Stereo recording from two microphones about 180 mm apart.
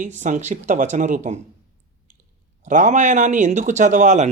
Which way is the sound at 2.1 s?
45° right (ahead or behind).